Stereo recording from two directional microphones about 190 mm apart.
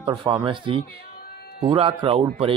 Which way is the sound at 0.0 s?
25° right (ahead or behind).